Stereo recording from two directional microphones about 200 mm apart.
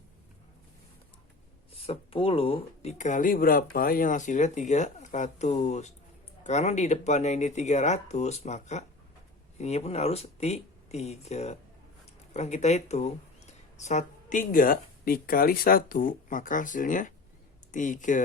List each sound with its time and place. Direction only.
1.9 s speech: 25° left (ahead or behind)